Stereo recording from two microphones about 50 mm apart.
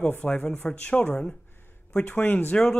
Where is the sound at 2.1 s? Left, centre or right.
Left.